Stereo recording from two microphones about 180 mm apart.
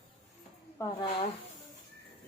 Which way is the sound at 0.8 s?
25° left (ahead or behind).